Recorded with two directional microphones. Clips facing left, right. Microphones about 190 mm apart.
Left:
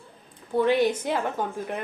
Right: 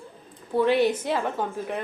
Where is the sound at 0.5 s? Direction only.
Centre (ahead or behind).